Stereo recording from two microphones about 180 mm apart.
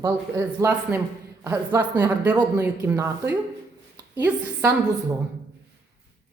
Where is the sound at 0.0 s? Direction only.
15° right (ahead or behind).